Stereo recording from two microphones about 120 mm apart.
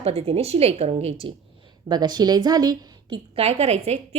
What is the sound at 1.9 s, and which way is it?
A woman's voice, 35° right (ahead or behind).